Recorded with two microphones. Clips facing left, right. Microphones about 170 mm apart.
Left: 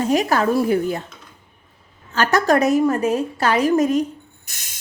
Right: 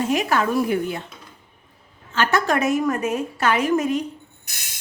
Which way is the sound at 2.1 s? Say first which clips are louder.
Left 4 dB; 40° left (ahead or behind).